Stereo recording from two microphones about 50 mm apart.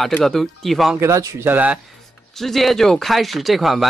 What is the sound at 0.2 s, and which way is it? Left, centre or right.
Speech, centre.